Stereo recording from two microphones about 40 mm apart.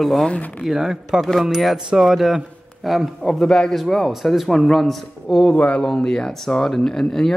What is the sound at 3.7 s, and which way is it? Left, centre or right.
Speech, centre.